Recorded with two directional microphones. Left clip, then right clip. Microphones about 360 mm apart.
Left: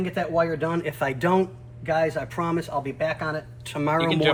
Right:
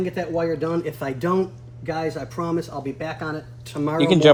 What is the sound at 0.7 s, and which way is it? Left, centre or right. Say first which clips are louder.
Speech: even; centre.